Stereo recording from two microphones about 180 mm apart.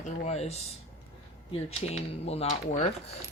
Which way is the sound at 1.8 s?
35° left (ahead or behind).